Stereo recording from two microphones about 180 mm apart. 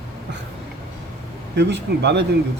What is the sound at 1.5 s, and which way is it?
Speech, 70° right (ahead or behind).